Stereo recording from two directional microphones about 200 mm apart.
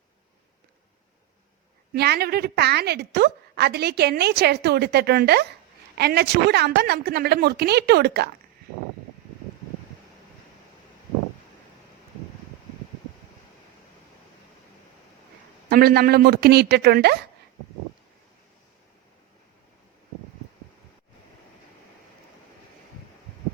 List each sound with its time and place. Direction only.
1.9 s a woman's voice: 55° right (ahead or behind)
15.7 s a woman's voice: 50° right (ahead or behind)